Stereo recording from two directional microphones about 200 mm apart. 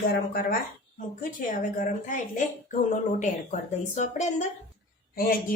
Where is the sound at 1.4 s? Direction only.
40° left (ahead or behind).